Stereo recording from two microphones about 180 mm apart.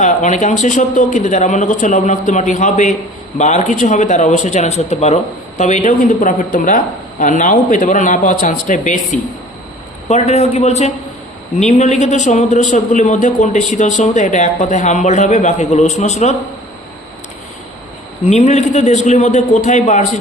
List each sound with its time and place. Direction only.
0.0 s a man's voice: 45° left (ahead or behind)
18.3 s a man's voice: 40° left (ahead or behind)